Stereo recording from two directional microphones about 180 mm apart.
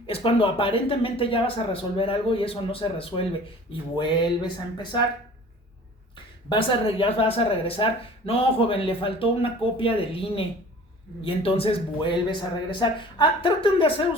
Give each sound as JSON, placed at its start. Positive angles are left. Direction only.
{"t": 0.1, "sound": "speech", "side_deg": 30}
{"t": 6.5, "sound": "speech", "side_deg": 30}